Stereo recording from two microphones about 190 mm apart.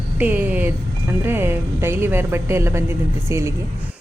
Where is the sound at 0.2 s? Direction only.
10° right (ahead or behind).